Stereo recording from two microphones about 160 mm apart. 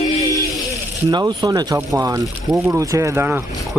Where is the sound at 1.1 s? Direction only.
25° right (ahead or behind).